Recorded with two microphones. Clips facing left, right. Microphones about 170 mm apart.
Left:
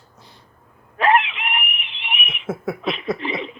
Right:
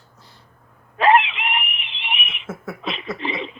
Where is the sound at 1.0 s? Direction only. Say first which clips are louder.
Right 2 dB; 25° right (ahead or behind).